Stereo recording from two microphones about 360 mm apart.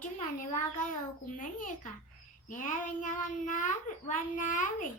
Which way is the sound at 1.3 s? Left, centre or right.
Left.